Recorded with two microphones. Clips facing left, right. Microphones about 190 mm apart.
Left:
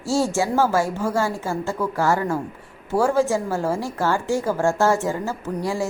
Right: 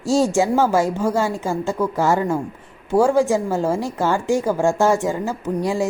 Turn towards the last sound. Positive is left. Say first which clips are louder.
# right 4 dB
turn(degrees=-15)  # may be behind; listen again after turning